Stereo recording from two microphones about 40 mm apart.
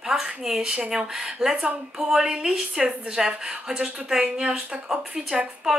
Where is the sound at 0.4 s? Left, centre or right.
Centre.